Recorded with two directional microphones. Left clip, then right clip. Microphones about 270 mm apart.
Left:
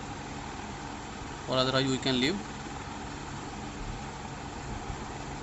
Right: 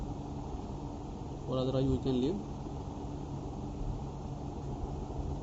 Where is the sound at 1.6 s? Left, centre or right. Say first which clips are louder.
Left 5 dB; left.